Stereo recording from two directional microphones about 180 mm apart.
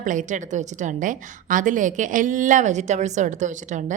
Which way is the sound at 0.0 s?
45° right (ahead or behind).